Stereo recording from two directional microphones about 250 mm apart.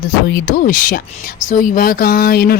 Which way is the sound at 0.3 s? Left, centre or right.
Left.